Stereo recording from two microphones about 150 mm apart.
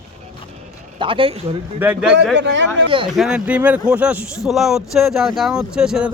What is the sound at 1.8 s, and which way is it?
A man's voice, 10° right (ahead or behind).